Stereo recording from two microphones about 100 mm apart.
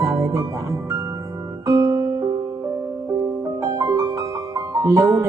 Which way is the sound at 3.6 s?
35° right (ahead or behind).